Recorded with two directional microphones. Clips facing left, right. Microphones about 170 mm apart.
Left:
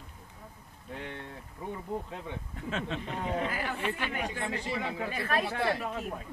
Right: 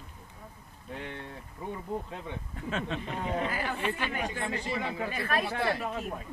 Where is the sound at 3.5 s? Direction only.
35° right (ahead or behind).